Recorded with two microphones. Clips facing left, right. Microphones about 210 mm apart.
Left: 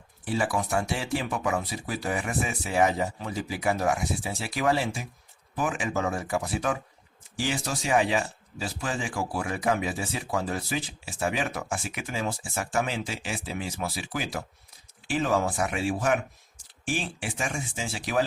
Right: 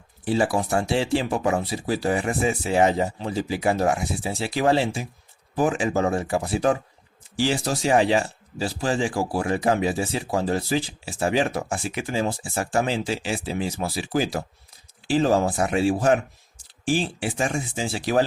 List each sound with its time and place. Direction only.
0.3 s speech: 30° right (ahead or behind)